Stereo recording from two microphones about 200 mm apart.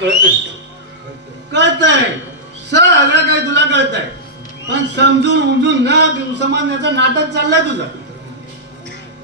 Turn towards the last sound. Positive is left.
turn(degrees=-60)  # may be behind; listen again after turning